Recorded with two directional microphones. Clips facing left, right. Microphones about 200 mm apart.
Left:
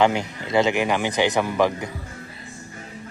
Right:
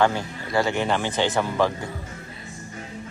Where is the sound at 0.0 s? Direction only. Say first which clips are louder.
Left 2 dB; 15° left (ahead or behind).